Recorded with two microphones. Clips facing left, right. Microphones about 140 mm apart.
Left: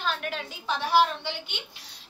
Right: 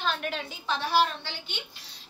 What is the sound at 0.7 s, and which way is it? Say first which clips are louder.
Speech: left 3 dB; 15° left (ahead or behind).